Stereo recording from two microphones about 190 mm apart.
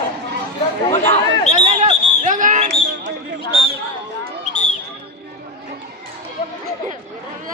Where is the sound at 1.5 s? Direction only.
35° right (ahead or behind).